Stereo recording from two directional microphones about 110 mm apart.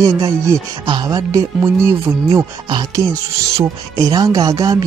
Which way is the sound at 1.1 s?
30° right (ahead or behind).